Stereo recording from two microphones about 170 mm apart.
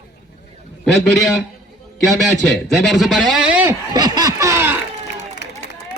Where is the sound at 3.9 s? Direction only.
25° right (ahead or behind).